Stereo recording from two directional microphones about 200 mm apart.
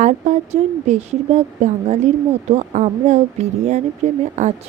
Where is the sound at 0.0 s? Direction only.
35° right (ahead or behind).